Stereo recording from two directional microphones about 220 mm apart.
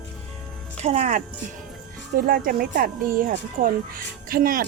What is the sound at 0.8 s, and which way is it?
Speech, 30° right (ahead or behind).